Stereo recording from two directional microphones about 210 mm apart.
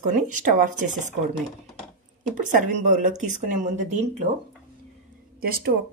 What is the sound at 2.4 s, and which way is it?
Speech, 40° right (ahead or behind).